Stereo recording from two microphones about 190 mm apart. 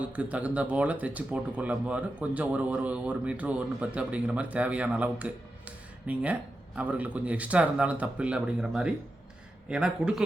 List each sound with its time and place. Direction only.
0.0 s a man's voice: 5° right (ahead or behind)